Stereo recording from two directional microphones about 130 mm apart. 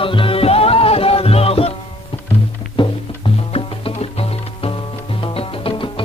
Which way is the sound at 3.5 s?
50° left (ahead or behind).